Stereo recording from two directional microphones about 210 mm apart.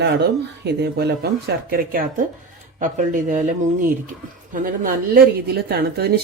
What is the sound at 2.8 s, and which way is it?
Speech, 35° right (ahead or behind).